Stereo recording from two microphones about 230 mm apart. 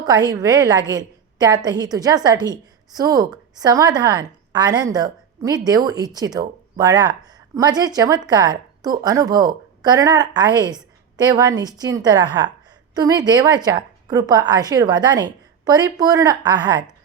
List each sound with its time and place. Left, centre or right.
0.0 s speech: centre